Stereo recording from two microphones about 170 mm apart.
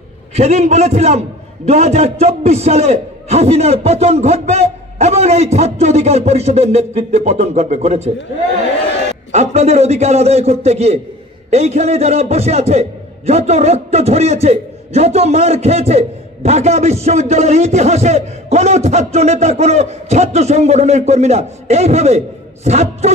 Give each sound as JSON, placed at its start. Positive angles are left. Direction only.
{"t": 0.4, "sound": "a man's voice", "side_deg": -40}
{"t": 9.3, "sound": "a man's voice", "side_deg": -40}